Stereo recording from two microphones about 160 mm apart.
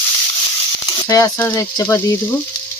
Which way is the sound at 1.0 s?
20° left (ahead or behind).